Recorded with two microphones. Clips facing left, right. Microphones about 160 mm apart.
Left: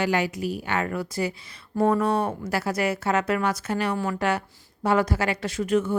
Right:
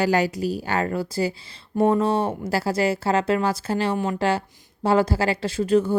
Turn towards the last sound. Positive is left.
turn(degrees=-30)  # may be behind; listen again after turning